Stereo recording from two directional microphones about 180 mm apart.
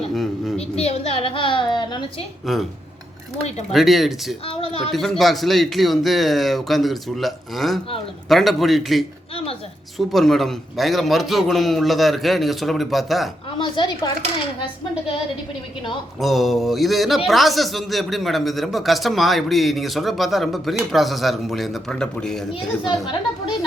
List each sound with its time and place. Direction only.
0.1 s a sound: centre (ahead or behind)
0.8 s a woman's voice: 35° left (ahead or behind)
2.5 s speech: centre (ahead or behind)
3.7 s speech: centre (ahead or behind)
4.4 s speech: 30° left (ahead or behind)
4.9 s speech: centre (ahead or behind)
10.1 s speech: centre (ahead or behind)
13.6 s a woman's voice: 25° left (ahead or behind)
16.2 s speech: centre (ahead or behind)